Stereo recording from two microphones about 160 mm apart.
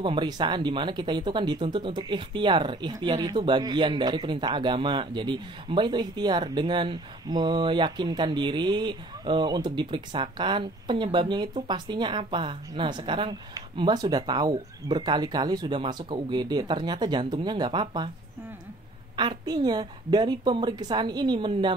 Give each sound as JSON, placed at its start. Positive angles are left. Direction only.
{"t": 0.0, "sound": "speech", "side_deg": -30}
{"t": 19.1, "sound": "speech", "side_deg": -25}